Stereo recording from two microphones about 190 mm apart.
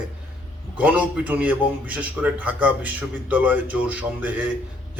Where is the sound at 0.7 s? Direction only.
5° right (ahead or behind).